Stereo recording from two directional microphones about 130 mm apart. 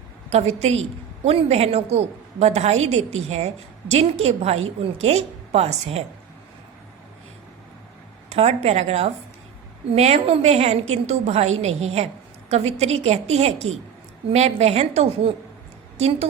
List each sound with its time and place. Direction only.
0.3 s a woman's voice: 55° right (ahead or behind)
8.3 s a woman's voice: 55° right (ahead or behind)